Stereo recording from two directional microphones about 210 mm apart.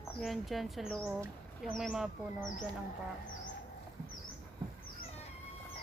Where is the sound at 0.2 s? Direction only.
Centre (ahead or behind).